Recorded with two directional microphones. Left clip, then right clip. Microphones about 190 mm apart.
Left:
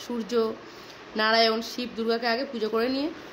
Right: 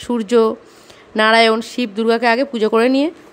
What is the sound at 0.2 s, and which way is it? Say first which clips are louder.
Speech: right 12 dB; 50° right (ahead or behind).